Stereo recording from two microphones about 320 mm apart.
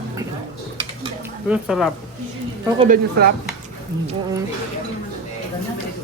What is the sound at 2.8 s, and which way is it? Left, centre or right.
Speech, right.